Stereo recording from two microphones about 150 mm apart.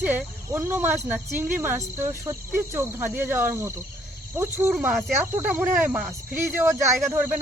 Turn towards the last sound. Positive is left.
turn(degrees=-15)  # may be behind; listen again after turning